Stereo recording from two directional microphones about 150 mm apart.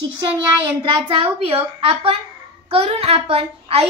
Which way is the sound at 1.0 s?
35° right (ahead or behind).